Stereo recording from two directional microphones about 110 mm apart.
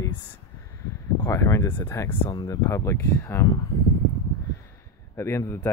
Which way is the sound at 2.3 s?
40° left (ahead or behind).